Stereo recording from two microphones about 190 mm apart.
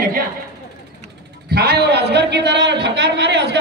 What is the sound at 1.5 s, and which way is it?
A man's voice, 55° right (ahead or behind).